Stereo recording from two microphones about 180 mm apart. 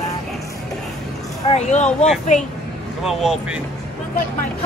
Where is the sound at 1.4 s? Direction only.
40° left (ahead or behind).